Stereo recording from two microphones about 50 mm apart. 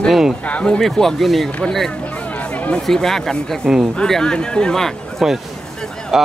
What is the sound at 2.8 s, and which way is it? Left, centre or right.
Speech, centre.